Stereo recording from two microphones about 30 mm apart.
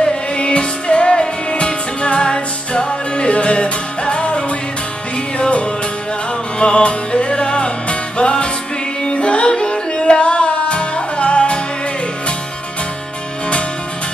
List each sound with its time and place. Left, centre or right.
0.1 s music: left
5.4 s music: left